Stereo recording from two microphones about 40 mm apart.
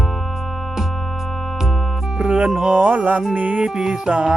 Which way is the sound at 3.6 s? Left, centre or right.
Centre.